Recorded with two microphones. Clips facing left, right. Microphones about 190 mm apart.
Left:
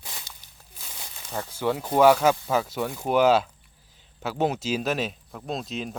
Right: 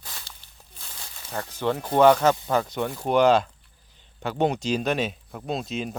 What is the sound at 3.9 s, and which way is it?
Speech, 5° left (ahead or behind).